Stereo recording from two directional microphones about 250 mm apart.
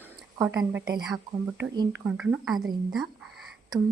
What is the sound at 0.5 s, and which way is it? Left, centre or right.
A woman's voice, centre.